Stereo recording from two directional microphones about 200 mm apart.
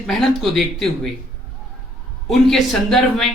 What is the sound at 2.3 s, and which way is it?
A man's voice, centre (ahead or behind).